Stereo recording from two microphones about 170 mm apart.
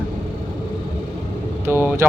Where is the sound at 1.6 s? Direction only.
15° right (ahead or behind).